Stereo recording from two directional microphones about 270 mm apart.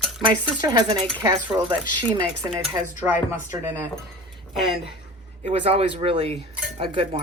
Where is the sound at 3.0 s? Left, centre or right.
Centre.